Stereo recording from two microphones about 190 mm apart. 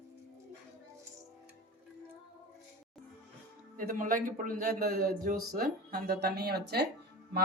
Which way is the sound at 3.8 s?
45° right (ahead or behind).